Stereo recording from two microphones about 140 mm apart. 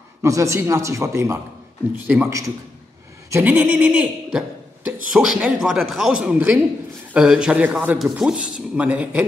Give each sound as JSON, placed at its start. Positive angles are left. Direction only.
{"t": 0.2, "sound": "a man's voice", "side_deg": -20}